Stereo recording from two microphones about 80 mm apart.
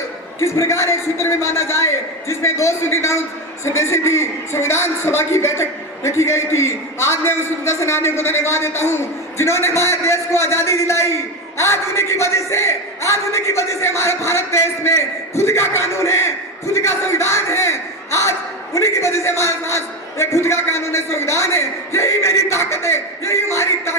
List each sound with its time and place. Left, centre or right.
0.3 s a man's voice: left